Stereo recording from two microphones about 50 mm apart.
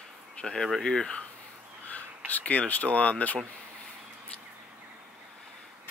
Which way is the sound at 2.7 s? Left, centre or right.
Left.